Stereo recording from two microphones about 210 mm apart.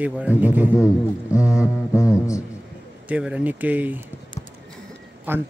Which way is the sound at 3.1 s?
5° right (ahead or behind).